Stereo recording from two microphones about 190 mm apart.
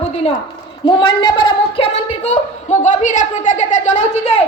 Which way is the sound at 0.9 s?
25° left (ahead or behind).